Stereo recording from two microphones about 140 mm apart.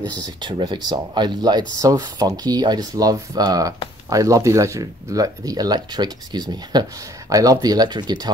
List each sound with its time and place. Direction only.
0.4 s speech: 35° right (ahead or behind)